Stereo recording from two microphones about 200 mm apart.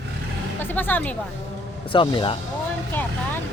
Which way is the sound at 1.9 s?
25° left (ahead or behind).